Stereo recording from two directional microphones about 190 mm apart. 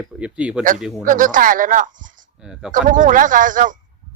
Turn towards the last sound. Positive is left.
turn(degrees=-45)  # may be behind; listen again after turning